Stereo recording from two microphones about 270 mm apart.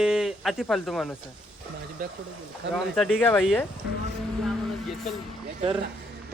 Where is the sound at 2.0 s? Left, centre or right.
Right.